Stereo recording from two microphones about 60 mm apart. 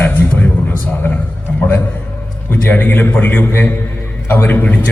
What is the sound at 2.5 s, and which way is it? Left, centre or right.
Speech, left.